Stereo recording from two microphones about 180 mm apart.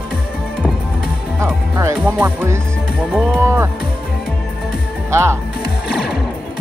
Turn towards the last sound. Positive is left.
turn(degrees=0)  # may be behind; listen again after turning